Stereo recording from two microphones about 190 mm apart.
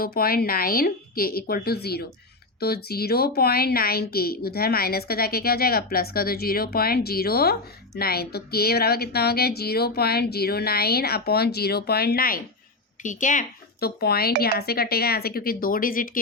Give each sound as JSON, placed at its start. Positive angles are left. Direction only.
{"t": 0.0, "sound": "a woman's voice", "side_deg": 50}